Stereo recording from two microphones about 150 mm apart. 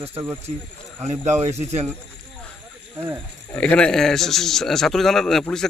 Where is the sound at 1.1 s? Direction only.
50° right (ahead or behind).